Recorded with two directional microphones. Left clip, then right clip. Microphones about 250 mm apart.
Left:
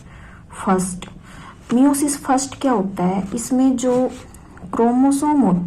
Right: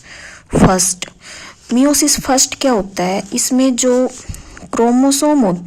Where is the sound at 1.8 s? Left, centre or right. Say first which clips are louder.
Right 5 dB; right.